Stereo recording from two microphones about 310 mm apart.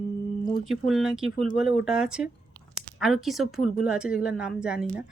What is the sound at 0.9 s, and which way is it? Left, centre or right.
Speech, centre.